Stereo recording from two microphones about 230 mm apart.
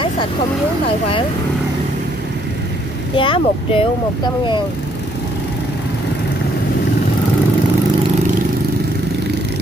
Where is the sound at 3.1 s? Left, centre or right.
Left.